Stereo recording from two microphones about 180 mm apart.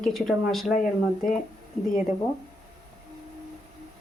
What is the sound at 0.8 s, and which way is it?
Speech, 50° left (ahead or behind).